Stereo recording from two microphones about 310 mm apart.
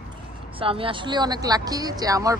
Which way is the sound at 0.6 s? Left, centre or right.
Centre.